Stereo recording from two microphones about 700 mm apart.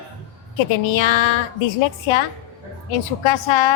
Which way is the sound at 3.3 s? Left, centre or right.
Left.